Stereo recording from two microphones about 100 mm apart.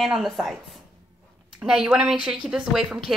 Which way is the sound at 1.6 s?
5° right (ahead or behind).